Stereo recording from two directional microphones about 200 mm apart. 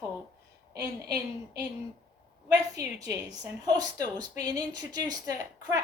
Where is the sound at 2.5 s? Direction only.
20° right (ahead or behind).